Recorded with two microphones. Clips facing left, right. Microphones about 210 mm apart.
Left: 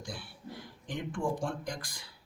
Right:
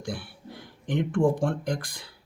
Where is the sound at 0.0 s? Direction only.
60° right (ahead or behind).